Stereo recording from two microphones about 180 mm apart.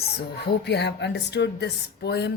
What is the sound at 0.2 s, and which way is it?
Speech, 65° left (ahead or behind).